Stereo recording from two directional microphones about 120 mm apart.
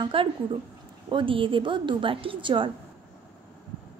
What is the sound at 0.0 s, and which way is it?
Speech, 45° right (ahead or behind).